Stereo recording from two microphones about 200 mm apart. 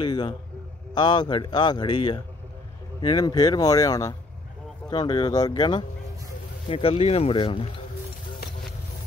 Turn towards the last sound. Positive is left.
turn(degrees=25)  # may be behind; listen again after turning